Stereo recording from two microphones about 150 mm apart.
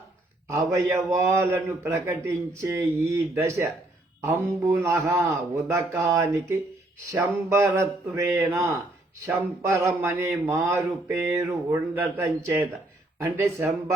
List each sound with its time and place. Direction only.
0.6 s a man's voice: 20° right (ahead or behind)